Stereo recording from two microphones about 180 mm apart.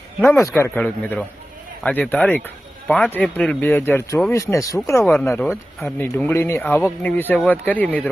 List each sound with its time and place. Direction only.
0.2 s speech: 15° left (ahead or behind)
5.3 s speech: 5° left (ahead or behind)